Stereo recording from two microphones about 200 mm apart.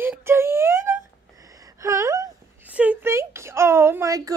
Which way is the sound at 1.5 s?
15° right (ahead or behind).